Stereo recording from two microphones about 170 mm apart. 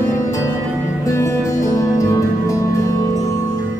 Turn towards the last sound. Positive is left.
turn(degrees=20)  # may be behind; listen again after turning